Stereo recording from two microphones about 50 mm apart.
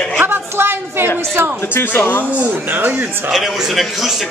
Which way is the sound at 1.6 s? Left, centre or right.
Left.